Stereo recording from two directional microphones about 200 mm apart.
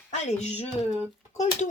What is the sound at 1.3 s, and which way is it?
Speech, 35° left (ahead or behind).